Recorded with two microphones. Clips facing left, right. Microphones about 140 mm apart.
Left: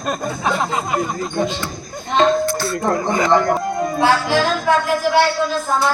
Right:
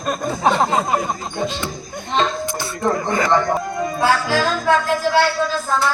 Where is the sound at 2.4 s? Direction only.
20° right (ahead or behind).